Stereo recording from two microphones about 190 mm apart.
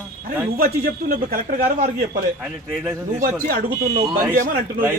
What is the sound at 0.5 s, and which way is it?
A man's voice, 50° right (ahead or behind).